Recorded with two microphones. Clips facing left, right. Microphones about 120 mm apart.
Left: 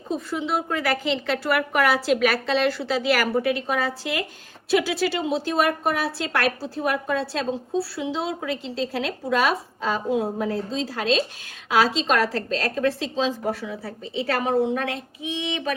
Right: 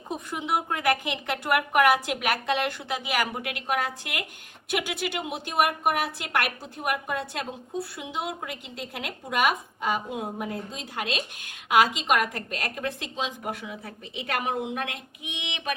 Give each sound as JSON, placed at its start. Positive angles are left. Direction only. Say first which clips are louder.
{"t": 0.1, "sound": "a woman's voice", "louder": "left 3 dB", "side_deg": -15}